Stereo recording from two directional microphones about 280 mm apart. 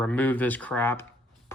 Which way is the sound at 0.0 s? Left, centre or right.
Centre.